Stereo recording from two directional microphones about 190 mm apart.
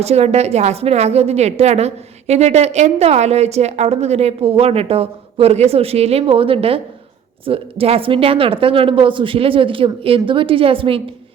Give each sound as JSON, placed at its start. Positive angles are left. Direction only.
{"t": 0.0, "sound": "a woman's voice", "side_deg": -35}